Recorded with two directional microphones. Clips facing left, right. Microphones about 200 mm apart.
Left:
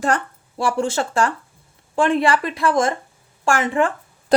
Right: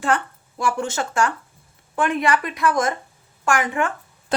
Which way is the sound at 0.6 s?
30° left (ahead or behind).